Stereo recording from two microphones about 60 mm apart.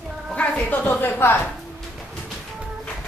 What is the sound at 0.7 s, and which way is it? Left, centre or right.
Speech, left.